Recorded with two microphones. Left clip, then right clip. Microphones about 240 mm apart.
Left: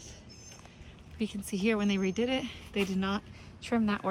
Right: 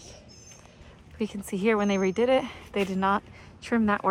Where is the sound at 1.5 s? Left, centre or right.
Centre.